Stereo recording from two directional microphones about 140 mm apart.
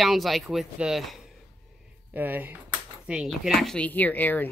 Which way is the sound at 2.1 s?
15° right (ahead or behind).